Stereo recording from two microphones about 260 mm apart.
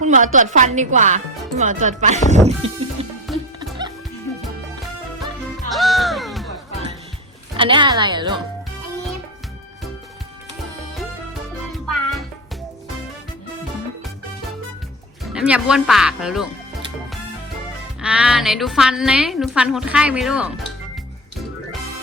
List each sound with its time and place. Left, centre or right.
0.0 s a sound: right
0.3 s speech: right
2.3 s music: right
5.7 s music: centre
7.5 s a woman's voice: centre
15.2 s speech: centre
18.0 s a woman's voice: centre